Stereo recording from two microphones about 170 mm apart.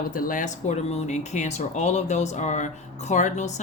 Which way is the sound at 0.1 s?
55° left (ahead or behind).